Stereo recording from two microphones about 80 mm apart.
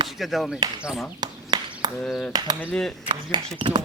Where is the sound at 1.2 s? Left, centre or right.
Right.